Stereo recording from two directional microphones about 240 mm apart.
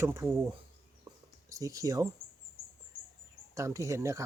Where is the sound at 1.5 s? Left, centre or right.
Centre.